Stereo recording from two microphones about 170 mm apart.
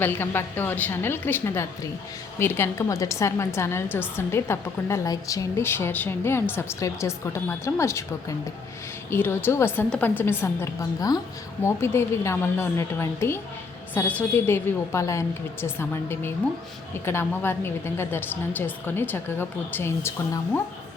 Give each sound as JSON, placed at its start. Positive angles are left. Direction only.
{"t": 0.0, "sound": "a woman's voice", "side_deg": 10}